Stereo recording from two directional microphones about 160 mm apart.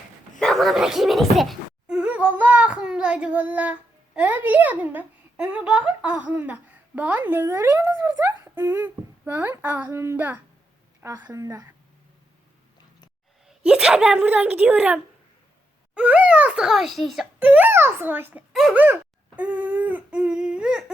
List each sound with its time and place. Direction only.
0.3 s a woman's voice: centre (ahead or behind); by 11.7 s 20° right (ahead or behind)
13.7 s a woman's voice: 5° right (ahead or behind)
17.4 s a woman's voice: 10° right (ahead or behind)